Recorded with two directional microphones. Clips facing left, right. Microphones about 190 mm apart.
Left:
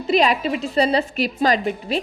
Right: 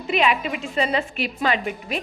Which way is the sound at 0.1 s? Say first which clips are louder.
Left 4 dB; 35° left (ahead or behind).